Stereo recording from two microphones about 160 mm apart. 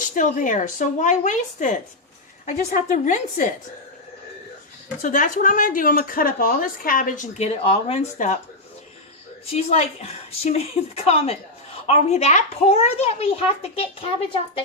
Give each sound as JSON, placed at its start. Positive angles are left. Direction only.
{"t": 0.0, "sound": "speech", "side_deg": 55}
{"t": 5.0, "sound": "speech", "side_deg": 55}
{"t": 9.5, "sound": "a child's voice", "side_deg": 40}